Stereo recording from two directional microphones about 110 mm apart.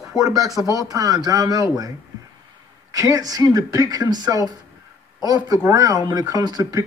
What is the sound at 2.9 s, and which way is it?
Speech, 35° right (ahead or behind).